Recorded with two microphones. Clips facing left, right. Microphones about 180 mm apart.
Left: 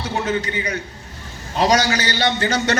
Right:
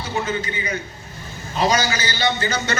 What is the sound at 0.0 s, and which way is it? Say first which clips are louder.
A man's voice: left 2 dB; 70° left (ahead or behind).